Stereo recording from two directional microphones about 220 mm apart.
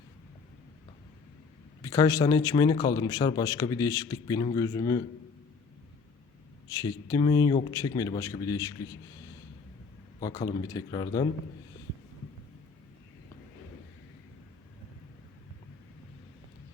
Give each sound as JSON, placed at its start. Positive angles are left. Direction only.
{"t": 1.8, "sound": "a man's voice", "side_deg": 15}
{"t": 6.7, "sound": "a man's voice", "side_deg": 15}
{"t": 10.2, "sound": "a man's voice", "side_deg": 15}